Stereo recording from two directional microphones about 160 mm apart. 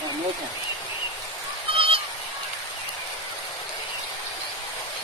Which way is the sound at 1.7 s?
35° right (ahead or behind).